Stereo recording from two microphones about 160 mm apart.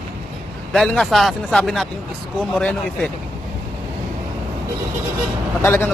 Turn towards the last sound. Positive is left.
turn(degrees=15)  # may be behind; listen again after turning